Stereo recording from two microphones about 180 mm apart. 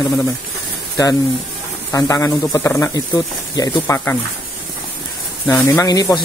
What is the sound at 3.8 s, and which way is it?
Speech, 10° left (ahead or behind).